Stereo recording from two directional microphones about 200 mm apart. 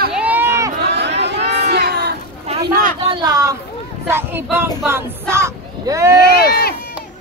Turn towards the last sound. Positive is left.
turn(degrees=50)  # may be behind; listen again after turning